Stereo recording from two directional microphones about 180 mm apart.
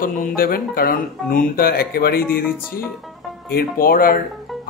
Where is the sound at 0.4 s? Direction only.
55° left (ahead or behind).